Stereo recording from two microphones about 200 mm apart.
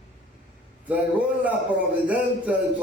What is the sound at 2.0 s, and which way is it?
Speech, 5° right (ahead or behind).